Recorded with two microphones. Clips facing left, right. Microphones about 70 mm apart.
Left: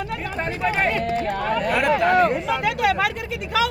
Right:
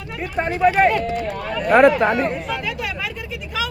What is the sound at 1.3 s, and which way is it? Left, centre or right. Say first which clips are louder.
Speech: left 3 dB; left.